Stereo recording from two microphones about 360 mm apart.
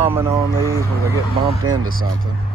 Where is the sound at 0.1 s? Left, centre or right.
Centre.